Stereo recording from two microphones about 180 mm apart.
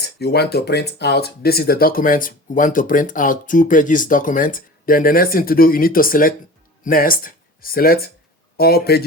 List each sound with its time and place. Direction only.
0.0 s a man's voice: 65° left (ahead or behind)